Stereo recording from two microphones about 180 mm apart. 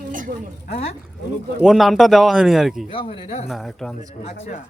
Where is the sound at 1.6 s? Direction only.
Centre (ahead or behind).